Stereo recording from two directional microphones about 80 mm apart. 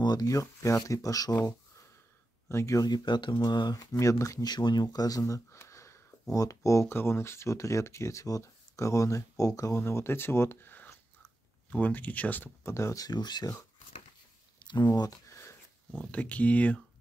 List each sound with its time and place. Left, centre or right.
0.0 s speech: left
0.3 s speech: left
2.5 s speech: left
3.7 s speech: left
4.9 s speech: left
5.2 s a sound: left
6.3 s speech: left
9.8 s speech: left
12.6 s speech: left
13.0 s speech: left
14.9 s a sound: left
16.1 s speech: centre